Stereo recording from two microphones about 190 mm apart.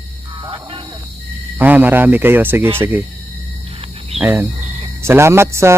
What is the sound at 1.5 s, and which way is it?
Speech, 10° right (ahead or behind).